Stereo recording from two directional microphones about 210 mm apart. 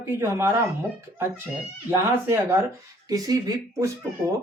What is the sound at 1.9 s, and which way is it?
Speech, 10° right (ahead or behind).